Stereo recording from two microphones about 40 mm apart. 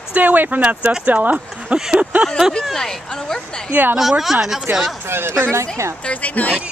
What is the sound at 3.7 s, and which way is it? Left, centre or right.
Speech, right.